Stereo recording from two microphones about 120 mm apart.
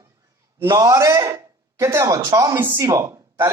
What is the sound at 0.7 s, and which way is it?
A man's voice, 30° right (ahead or behind).